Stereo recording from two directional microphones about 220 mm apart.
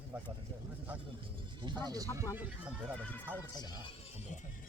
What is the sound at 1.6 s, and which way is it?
Speech, 20° right (ahead or behind).